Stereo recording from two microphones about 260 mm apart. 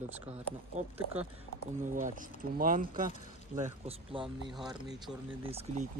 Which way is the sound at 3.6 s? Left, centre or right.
Right.